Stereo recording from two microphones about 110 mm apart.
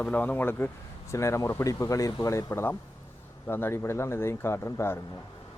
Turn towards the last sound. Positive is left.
turn(degrees=20)  # may be behind; listen again after turning